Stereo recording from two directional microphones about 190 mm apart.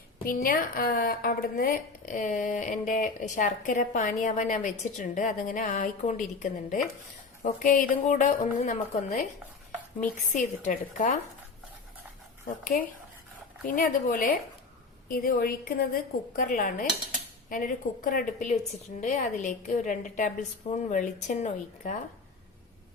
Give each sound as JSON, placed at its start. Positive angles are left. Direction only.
{"t": 0.3, "sound": "a woman's voice", "side_deg": 50}
{"t": 12.7, "sound": "a woman's voice", "side_deg": 45}